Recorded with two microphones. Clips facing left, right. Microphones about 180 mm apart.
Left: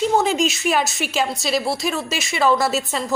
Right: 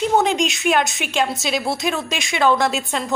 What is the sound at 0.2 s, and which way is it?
A woman's voice, centre (ahead or behind).